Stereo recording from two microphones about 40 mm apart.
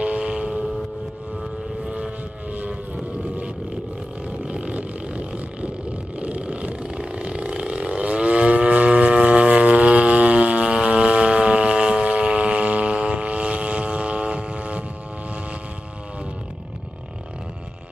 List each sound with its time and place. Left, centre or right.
0.0 s vehicle: right
1.9 s vehicle: right
4.4 s a sound: right
7.2 s vehicle: right